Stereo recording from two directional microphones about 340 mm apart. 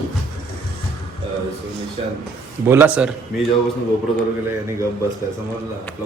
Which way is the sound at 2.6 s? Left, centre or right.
Centre.